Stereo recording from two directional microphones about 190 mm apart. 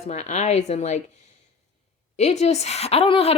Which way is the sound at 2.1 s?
35° left (ahead or behind).